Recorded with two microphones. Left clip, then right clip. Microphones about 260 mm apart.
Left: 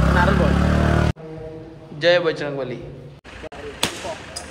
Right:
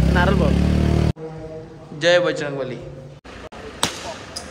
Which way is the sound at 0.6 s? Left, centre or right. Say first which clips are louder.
Left 3 dB; left.